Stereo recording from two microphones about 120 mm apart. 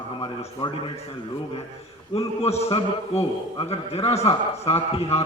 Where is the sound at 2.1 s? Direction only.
60° left (ahead or behind).